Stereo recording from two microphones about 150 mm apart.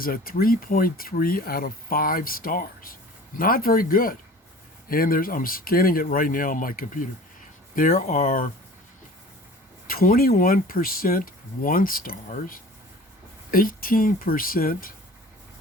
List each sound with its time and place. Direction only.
0.0 s speech: 75° left (ahead or behind)
9.9 s speech: 70° left (ahead or behind)